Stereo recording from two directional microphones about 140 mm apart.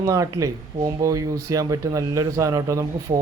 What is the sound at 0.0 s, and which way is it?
Speech, 25° right (ahead or behind).